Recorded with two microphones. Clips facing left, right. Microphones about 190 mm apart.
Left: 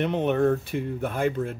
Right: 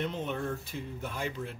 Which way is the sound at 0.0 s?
70° left (ahead or behind).